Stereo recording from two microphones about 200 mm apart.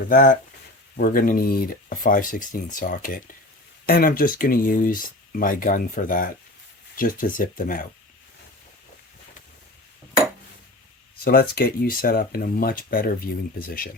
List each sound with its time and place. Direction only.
0.1 s speech: 40° left (ahead or behind)
11.2 s speech: 50° left (ahead or behind)